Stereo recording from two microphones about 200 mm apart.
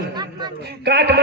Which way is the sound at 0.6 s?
55° right (ahead or behind).